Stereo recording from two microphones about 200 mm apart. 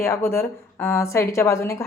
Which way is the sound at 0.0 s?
15° left (ahead or behind).